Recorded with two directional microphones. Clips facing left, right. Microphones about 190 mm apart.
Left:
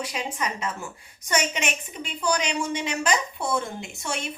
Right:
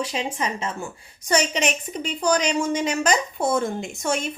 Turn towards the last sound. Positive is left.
turn(degrees=-45)  # may be behind; listen again after turning